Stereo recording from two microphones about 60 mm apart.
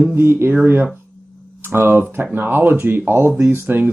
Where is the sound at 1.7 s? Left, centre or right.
Right.